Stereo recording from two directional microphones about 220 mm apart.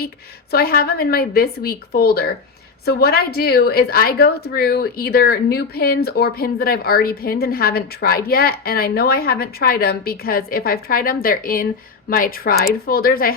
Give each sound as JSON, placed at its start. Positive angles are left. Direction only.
{"t": 0.5, "sound": "a woman's voice", "side_deg": 40}